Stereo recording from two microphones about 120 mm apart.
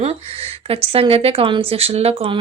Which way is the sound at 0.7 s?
55° right (ahead or behind).